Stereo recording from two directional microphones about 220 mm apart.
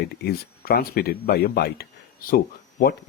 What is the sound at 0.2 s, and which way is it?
Speech, 45° left (ahead or behind).